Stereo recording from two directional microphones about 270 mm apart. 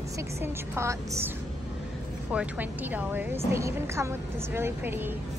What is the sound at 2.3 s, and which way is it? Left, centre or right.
A woman's voice, centre.